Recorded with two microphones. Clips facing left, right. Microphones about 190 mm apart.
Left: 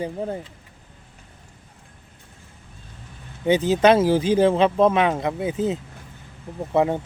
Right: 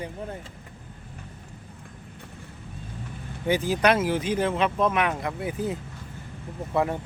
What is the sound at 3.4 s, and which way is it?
Speech, 20° left (ahead or behind).